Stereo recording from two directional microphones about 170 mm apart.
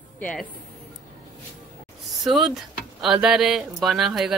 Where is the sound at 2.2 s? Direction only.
Centre (ahead or behind).